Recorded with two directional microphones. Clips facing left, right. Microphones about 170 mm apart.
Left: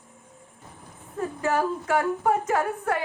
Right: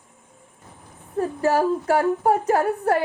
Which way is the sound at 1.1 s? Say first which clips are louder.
Right 5 dB; 35° right (ahead or behind).